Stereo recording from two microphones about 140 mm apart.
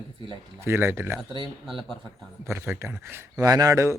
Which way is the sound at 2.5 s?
20° right (ahead or behind).